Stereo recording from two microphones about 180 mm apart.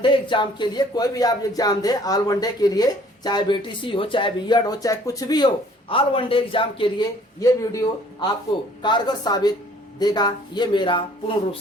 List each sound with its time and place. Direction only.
0.0 s speech: 25° left (ahead or behind)
7.3 s speech: 20° left (ahead or behind)